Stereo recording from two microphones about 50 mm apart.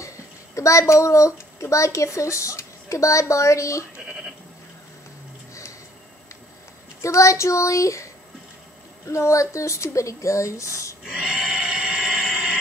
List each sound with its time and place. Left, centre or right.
0.6 s speech: left
7.0 s speech: left
11.1 s a sound: centre